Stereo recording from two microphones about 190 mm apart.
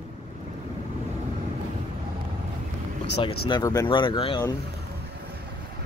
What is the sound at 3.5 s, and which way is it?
Speech, 20° left (ahead or behind).